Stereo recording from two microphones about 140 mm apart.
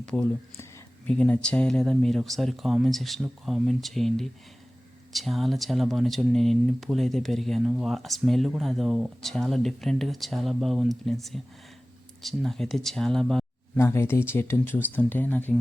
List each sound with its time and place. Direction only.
0.0 s speech: 5° left (ahead or behind)
13.7 s speech: 20° left (ahead or behind)